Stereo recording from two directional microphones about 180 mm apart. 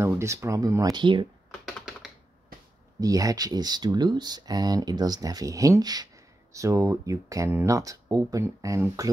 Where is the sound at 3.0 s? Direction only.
20° right (ahead or behind).